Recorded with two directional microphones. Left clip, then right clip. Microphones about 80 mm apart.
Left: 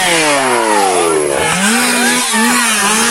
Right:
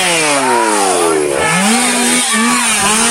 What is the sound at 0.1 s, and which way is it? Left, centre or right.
Chainsaw, left.